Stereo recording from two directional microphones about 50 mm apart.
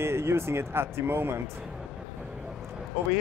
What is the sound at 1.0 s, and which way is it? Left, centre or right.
Speech, right.